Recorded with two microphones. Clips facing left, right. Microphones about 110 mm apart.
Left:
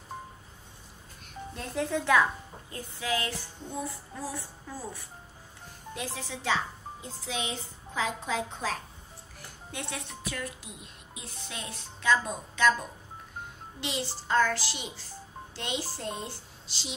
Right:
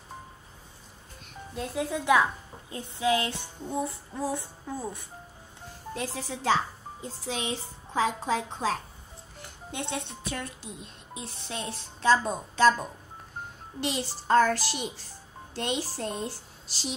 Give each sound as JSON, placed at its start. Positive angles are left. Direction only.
{"t": 1.5, "sound": "speech", "side_deg": -10}
{"t": 2.7, "sound": "child singing", "side_deg": -25}
{"t": 5.9, "sound": "a child's voice", "side_deg": -40}
{"t": 13.7, "sound": "a woman's voice", "side_deg": -45}